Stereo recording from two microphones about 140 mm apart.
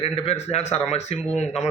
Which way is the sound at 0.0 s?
45° left (ahead or behind).